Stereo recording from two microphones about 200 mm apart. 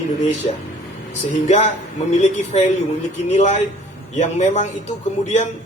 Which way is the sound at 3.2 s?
35° left (ahead or behind).